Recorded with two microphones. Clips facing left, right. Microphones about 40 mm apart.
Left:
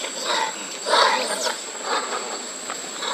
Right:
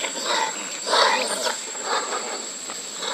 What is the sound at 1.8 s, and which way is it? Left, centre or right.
Train, centre.